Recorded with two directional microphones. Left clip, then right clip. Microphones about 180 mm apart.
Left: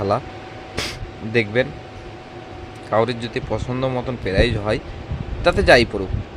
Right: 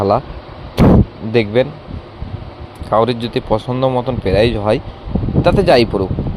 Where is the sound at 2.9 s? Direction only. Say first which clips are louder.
Right 5 dB; 25° right (ahead or behind).